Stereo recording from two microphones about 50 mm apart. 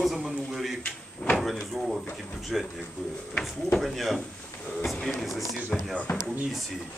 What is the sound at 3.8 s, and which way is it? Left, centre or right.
Speech, centre.